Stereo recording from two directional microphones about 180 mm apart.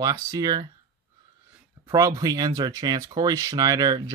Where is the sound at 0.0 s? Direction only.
20° right (ahead or behind).